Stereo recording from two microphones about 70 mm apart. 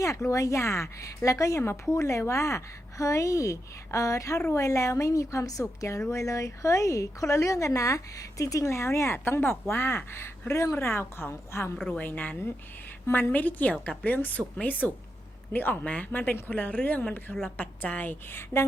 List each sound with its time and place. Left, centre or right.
0.0 s a woman's voice: left
9.1 s a woman's voice: left
11.9 s speech: left